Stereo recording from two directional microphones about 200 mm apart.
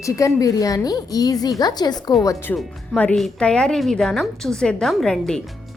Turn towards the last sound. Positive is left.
turn(degrees=5)  # may be behind; listen again after turning